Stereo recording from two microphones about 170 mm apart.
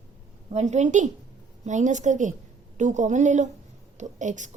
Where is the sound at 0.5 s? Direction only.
40° right (ahead or behind).